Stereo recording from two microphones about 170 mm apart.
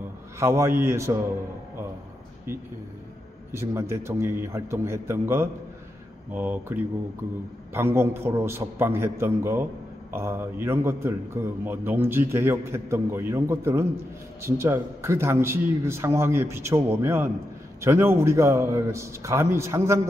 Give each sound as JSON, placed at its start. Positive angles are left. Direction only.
{"t": 0.4, "sound": "a man's voice", "side_deg": -15}
{"t": 3.5, "sound": "a man's voice", "side_deg": -15}